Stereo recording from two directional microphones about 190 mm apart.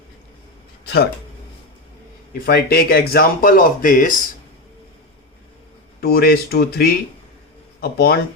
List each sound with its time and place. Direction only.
2.5 s speech: 55° left (ahead or behind)
6.0 s speech: 55° left (ahead or behind)